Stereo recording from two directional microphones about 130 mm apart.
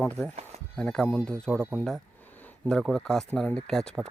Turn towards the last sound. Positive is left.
turn(degrees=5)  # may be behind; listen again after turning